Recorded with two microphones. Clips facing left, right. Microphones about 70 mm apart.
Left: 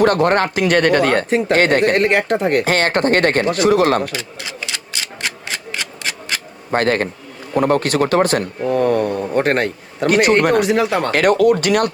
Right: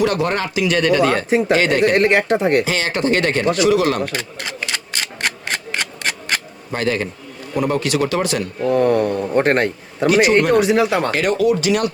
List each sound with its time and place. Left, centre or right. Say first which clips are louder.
0.0 s speech: left 4 dB; left
1.3 s speech: right 1 dB; centre
1.5 s speech: left 3 dB; left
2.0 s a man's voice: right 1 dB; centre
2.6 s speech: left 3 dB; left
4.1 s a sound: right 1 dB; right
6.7 s speech: left 4 dB; left
8.6 s a man's voice: right 2 dB; centre
10.1 s speech: even; left
10.6 s a man's voice: right 1 dB; centre
11.1 s speech: left 4 dB; left